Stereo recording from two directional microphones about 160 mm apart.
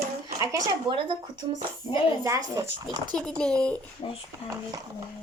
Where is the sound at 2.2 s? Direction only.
20° right (ahead or behind).